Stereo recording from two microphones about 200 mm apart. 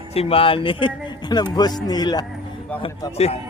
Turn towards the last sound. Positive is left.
turn(degrees=30)  # may be behind; listen again after turning